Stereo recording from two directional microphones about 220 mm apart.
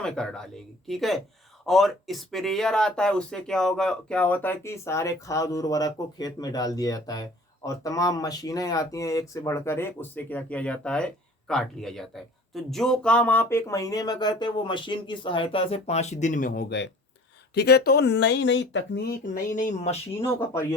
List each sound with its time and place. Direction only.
0.0 s speech: 5° left (ahead or behind); by 20.0 s 35° left (ahead or behind)
20.2 s speech: 10° left (ahead or behind)